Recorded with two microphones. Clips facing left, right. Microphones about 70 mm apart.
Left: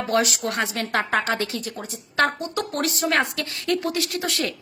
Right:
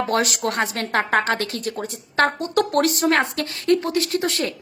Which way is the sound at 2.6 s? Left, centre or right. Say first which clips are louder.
Right 8 dB; right.